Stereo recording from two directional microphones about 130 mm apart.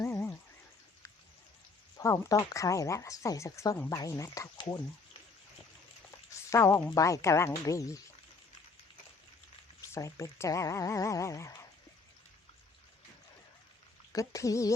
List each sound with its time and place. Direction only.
0.0 s a sound: 20° left (ahead or behind)
2.0 s speech: 25° left (ahead or behind)
4.5 s speech: 40° left (ahead or behind)
6.5 s speech: 25° left (ahead or behind)
9.8 s speech: 25° left (ahead or behind)
14.1 s speech: 25° left (ahead or behind)